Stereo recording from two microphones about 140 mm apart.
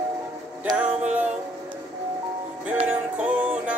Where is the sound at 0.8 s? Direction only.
10° right (ahead or behind).